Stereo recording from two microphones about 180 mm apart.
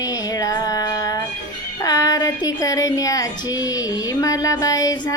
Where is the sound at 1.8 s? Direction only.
20° left (ahead or behind).